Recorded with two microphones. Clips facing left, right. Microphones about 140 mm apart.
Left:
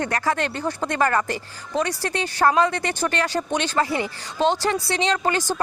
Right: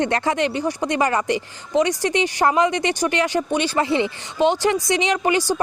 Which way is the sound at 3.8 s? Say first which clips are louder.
Right 5 dB; 20° right (ahead or behind).